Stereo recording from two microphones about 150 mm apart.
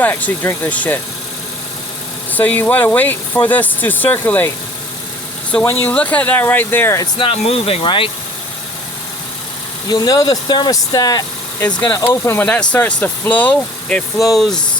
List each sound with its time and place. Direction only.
0.0 s speech: 10° left (ahead or behind)
2.3 s speech: 10° left (ahead or behind)
5.8 s speech: 10° left (ahead or behind)
7.2 s speech: 40° left (ahead or behind)
9.9 s speech: 25° left (ahead or behind); by 14.6 s centre (ahead or behind)